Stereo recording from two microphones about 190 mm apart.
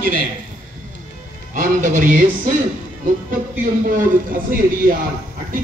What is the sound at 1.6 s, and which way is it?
Speech, 40° right (ahead or behind).